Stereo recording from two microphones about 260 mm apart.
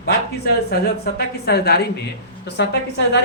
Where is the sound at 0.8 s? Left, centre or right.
Left.